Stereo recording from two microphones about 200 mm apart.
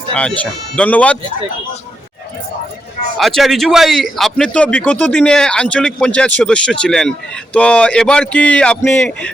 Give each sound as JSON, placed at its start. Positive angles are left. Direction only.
{"t": 0.1, "sound": "a man's voice", "side_deg": 5}
{"t": 3.2, "sound": "a man's voice", "side_deg": 0}